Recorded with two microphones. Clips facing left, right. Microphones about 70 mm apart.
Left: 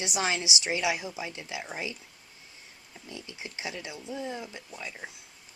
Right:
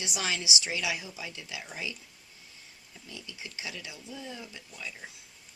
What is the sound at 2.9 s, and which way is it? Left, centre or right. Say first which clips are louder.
Speech: left 3 dB; left.